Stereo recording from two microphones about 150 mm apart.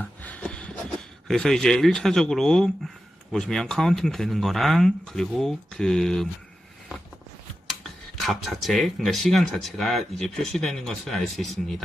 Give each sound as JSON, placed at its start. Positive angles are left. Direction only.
{"t": 0.2, "sound": "a sound", "side_deg": 10}
{"t": 3.3, "sound": "speech", "side_deg": 0}
{"t": 7.6, "sound": "speech", "side_deg": 0}